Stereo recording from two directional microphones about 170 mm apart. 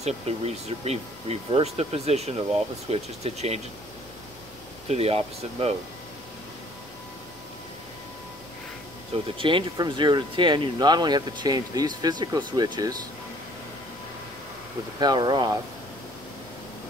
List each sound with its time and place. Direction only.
0.0 s speech: 40° right (ahead or behind)
4.8 s speech: 35° right (ahead or behind)
9.4 s speech: 30° right (ahead or behind)
15.0 s speech: 25° right (ahead or behind)